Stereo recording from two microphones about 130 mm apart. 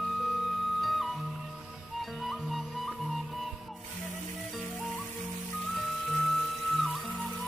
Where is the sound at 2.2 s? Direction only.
Centre (ahead or behind).